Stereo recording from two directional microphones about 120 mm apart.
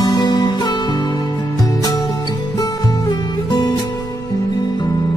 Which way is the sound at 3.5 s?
35° left (ahead or behind).